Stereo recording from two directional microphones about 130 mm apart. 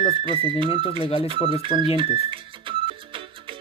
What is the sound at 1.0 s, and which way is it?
Speech, 40° left (ahead or behind).